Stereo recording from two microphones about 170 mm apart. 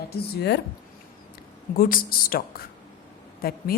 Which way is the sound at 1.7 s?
60° left (ahead or behind).